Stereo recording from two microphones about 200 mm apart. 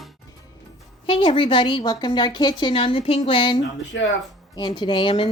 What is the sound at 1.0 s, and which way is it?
A woman's voice, 25° left (ahead or behind).